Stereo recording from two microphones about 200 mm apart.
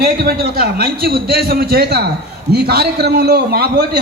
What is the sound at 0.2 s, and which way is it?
A man's voice, 50° right (ahead or behind).